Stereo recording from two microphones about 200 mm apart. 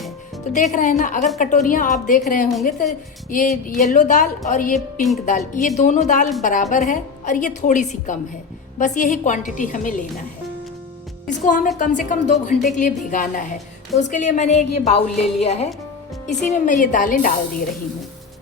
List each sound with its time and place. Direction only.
0.5 s a woman's voice: 40° left (ahead or behind)
11.3 s a woman's voice: 40° left (ahead or behind)